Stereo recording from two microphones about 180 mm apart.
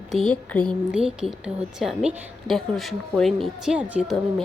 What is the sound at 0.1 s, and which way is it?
A woman's voice, centre (ahead or behind).